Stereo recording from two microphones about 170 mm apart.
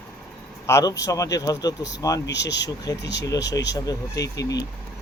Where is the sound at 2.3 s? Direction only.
90° left.